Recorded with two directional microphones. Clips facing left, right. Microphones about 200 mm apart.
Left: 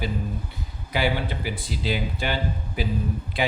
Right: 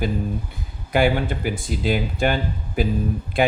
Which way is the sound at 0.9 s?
50° right (ahead or behind).